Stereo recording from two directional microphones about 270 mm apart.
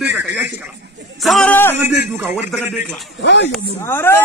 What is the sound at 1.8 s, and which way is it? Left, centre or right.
Speech, centre.